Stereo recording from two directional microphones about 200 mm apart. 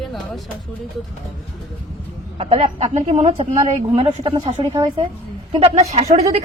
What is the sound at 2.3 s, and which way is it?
A woman's voice, 30° right (ahead or behind).